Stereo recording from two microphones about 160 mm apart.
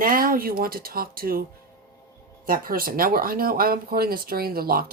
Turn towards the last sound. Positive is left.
turn(degrees=-70)  # may be behind; listen again after turning